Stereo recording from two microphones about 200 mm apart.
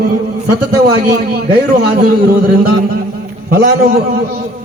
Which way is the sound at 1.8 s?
50° right (ahead or behind).